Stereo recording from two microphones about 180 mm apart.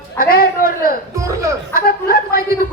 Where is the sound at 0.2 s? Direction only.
55° left (ahead or behind).